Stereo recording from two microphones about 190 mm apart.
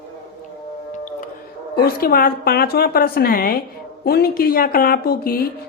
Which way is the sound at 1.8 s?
50° left (ahead or behind).